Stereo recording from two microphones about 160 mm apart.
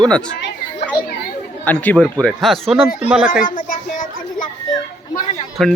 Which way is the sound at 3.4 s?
60° left (ahead or behind).